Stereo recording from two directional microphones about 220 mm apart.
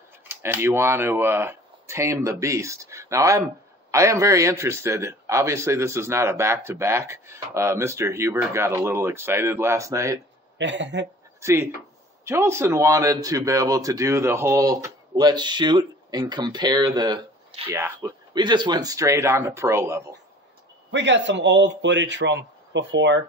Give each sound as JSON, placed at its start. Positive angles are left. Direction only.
{"t": 0.3, "sound": "a man's voice", "side_deg": -10}
{"t": 10.6, "sound": "speech", "side_deg": -55}
{"t": 11.4, "sound": "a man's voice", "side_deg": -10}
{"t": 20.9, "sound": "a man's voice", "side_deg": -55}